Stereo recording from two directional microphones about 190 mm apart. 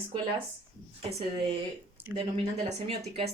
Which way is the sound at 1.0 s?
30° right (ahead or behind).